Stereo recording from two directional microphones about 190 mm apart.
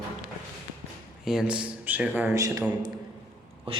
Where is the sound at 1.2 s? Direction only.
5° right (ahead or behind).